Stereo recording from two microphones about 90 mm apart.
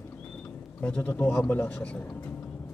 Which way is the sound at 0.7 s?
15° left (ahead or behind).